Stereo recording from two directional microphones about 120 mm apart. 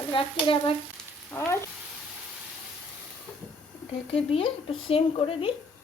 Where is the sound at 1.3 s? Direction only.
20° left (ahead or behind).